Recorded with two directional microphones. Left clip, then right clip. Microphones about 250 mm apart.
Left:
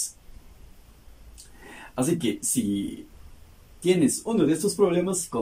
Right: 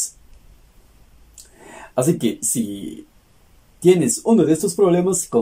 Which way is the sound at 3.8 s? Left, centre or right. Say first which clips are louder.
Right 7 dB; right.